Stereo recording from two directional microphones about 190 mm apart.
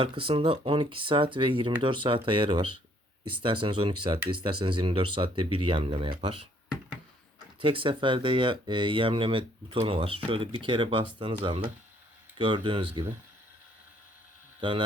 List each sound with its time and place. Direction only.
0.0 s speech: 30° right (ahead or behind)
7.6 s speech: 25° right (ahead or behind)
12.4 s speech: 25° right (ahead or behind)
14.6 s speech: 25° right (ahead or behind)